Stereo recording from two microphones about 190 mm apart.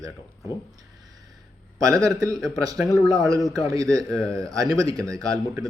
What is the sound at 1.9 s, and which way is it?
A man's voice, 20° right (ahead or behind).